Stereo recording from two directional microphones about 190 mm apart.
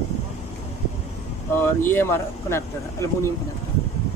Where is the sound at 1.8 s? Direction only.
10° left (ahead or behind).